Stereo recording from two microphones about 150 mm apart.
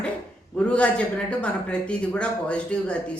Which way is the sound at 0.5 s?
10° left (ahead or behind).